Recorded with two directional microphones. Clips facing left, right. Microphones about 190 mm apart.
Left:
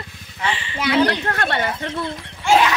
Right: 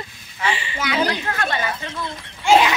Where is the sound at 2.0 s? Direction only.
Centre (ahead or behind).